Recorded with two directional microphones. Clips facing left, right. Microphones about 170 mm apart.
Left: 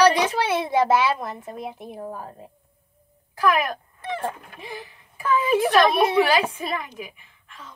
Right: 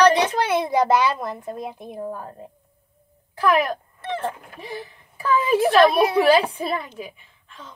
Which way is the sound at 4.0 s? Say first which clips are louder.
Right 1 dB; 10° left (ahead or behind).